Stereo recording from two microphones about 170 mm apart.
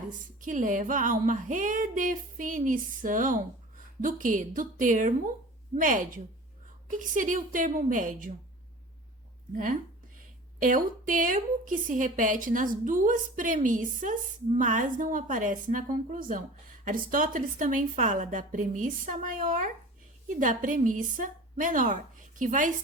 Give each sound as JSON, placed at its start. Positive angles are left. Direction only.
{"t": 0.1, "sound": "a woman's voice", "side_deg": -50}
{"t": 10.6, "sound": "a woman's voice", "side_deg": -50}